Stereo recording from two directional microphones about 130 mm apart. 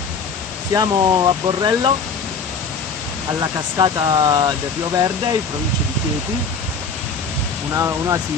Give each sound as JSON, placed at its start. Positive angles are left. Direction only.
{"t": 0.7, "sound": "speech", "side_deg": -35}
{"t": 3.3, "sound": "speech", "side_deg": -30}
{"t": 7.7, "sound": "speech", "side_deg": -25}